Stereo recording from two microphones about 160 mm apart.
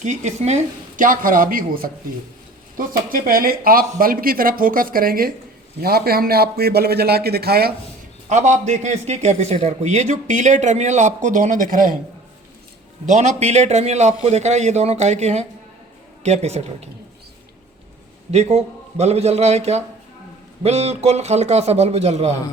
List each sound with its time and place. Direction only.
0.0 s a man's voice: 45° right (ahead or behind); by 7.7 s 75° right (ahead or behind)
8.3 s a man's voice: 50° right (ahead or behind)
13.1 s a man's voice: 45° right (ahead or behind)
18.3 s a man's voice: 40° right (ahead or behind)